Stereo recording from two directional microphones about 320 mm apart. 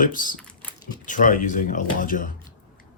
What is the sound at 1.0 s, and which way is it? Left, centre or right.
Speech, left.